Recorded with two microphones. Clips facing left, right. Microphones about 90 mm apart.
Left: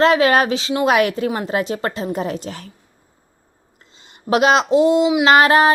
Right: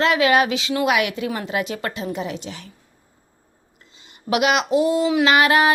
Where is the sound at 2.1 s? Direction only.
40° left (ahead or behind).